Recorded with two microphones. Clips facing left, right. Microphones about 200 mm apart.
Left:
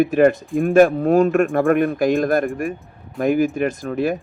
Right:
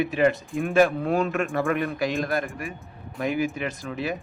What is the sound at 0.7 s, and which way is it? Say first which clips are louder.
A man's voice: left 7 dB; 50° left (ahead or behind).